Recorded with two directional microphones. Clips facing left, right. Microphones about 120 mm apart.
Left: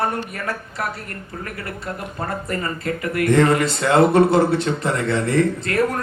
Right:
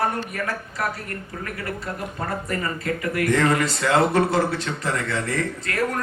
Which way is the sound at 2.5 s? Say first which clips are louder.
Left 1 dB; 30° left (ahead or behind).